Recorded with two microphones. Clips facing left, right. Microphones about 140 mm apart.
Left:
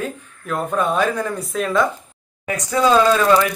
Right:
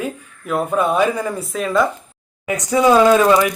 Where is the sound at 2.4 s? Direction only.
15° right (ahead or behind).